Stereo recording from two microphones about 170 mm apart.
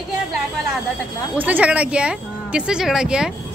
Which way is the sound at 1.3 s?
10° right (ahead or behind).